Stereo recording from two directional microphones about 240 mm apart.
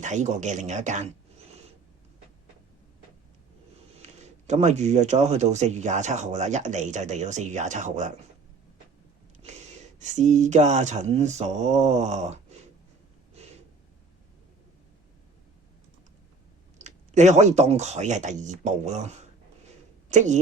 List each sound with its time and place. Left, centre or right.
0.0 s speech: right
3.9 s speech: right
10.0 s speech: right
16.8 s a woman's voice: right